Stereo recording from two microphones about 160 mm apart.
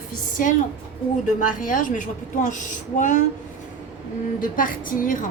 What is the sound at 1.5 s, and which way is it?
A woman's voice, 55° left (ahead or behind).